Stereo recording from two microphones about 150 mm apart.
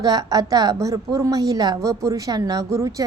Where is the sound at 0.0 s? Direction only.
25° right (ahead or behind).